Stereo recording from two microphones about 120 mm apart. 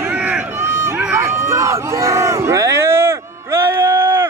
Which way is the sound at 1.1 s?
25° right (ahead or behind).